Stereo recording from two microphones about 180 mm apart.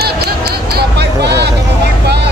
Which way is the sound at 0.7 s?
70° right (ahead or behind).